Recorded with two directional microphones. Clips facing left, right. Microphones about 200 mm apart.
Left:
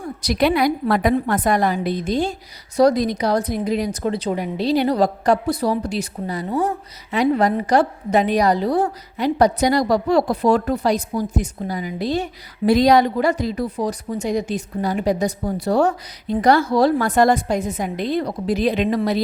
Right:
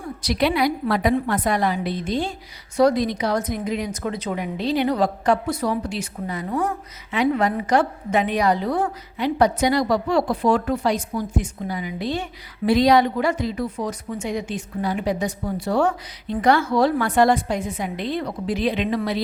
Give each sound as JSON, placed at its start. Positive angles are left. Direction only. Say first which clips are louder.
{"t": 0.2, "sound": "a woman's voice", "louder": "left 3 dB", "side_deg": 45}